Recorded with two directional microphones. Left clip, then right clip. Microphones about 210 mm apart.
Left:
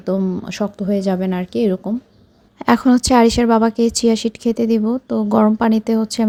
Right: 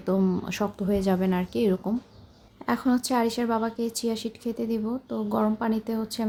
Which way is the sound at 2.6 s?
35° left (ahead or behind).